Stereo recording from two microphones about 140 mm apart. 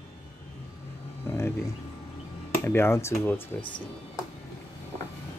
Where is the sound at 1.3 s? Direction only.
15° left (ahead or behind).